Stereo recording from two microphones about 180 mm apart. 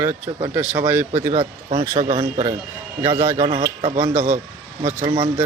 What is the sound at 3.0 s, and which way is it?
Speech, 15° right (ahead or behind).